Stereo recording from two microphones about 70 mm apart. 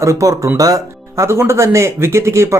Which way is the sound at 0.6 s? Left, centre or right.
Right.